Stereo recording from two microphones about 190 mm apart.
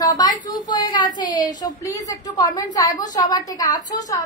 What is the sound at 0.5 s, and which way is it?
A woman's voice, 20° left (ahead or behind).